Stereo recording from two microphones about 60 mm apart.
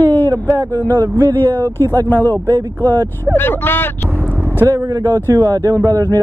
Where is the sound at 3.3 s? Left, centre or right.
Left.